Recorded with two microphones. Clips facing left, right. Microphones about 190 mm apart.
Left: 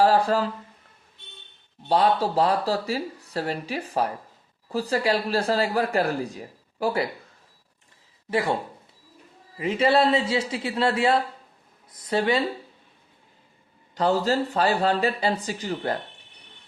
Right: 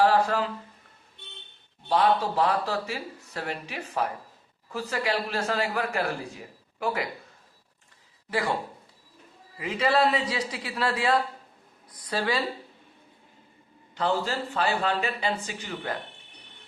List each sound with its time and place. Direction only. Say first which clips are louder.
0.0 s speech: left 2 dB; 35° left (ahead or behind)
1.9 s speech: left 2 dB; 35° left (ahead or behind)
8.3 s a man's voice: left 4 dB; 25° left (ahead or behind)
9.6 s a man's voice: left 4 dB; 25° left (ahead or behind)
13.9 s speech: left 5 dB; 40° left (ahead or behind)